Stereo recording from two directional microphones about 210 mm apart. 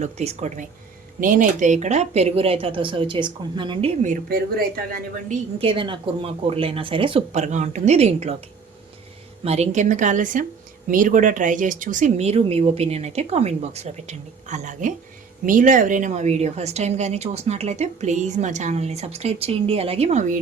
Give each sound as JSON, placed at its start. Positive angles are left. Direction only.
{"t": 0.0, "sound": "speech", "side_deg": -30}
{"t": 5.5, "sound": "speech", "side_deg": -25}
{"t": 9.4, "sound": "speech", "side_deg": -30}